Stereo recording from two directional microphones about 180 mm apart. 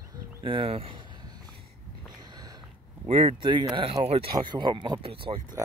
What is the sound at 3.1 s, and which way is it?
Speech, 35° right (ahead or behind).